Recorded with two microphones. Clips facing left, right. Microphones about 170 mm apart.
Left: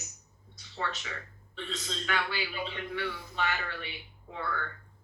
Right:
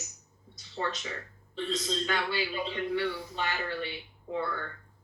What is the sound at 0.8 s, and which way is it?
Speech, 30° right (ahead or behind).